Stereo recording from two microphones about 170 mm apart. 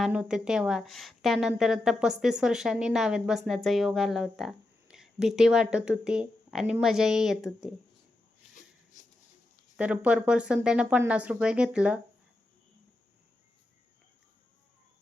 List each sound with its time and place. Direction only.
0.0 s a woman's voice: 5° right (ahead or behind)
8.5 s a sound: 50° left (ahead or behind)
9.7 s speech: 5° right (ahead or behind)